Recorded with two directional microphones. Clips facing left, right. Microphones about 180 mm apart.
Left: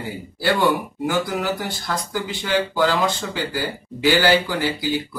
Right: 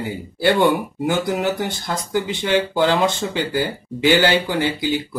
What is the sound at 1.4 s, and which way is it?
Speech, 20° right (ahead or behind).